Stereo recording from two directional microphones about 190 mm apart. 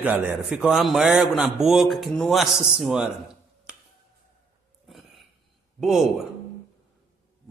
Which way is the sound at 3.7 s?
5° right (ahead or behind).